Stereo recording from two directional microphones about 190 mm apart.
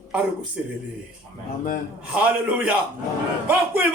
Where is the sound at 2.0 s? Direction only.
5° right (ahead or behind).